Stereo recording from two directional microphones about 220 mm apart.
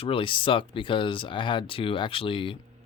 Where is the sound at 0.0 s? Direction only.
25° left (ahead or behind).